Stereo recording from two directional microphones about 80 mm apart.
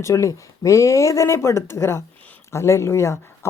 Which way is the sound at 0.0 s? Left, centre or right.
Left.